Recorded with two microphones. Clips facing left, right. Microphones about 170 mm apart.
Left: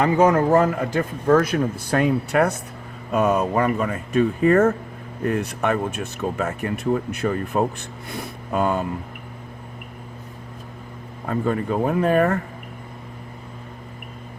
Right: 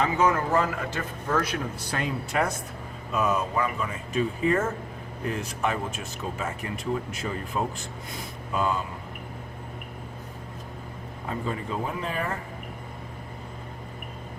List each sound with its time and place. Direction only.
0.0 s speech: 50° left (ahead or behind)
11.3 s speech: 55° left (ahead or behind)